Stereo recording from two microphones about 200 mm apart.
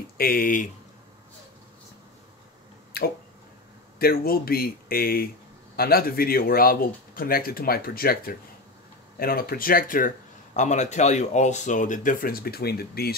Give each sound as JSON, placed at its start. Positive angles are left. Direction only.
{"t": 0.2, "sound": "speech", "side_deg": 45}
{"t": 2.9, "sound": "a sound", "side_deg": 50}
{"t": 4.0, "sound": "speech", "side_deg": 50}